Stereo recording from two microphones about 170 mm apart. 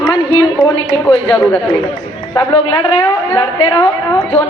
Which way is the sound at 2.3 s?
25° left (ahead or behind).